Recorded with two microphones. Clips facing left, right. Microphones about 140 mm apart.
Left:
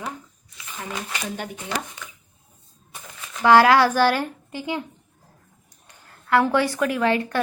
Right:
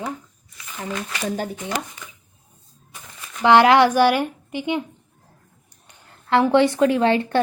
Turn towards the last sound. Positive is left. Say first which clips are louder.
# right 4 dB
turn(degrees=-30)  # may be behind; listen again after turning